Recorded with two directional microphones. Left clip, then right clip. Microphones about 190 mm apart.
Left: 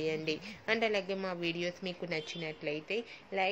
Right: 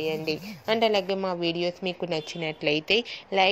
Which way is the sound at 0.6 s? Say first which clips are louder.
Right 8 dB; 25° right (ahead or behind).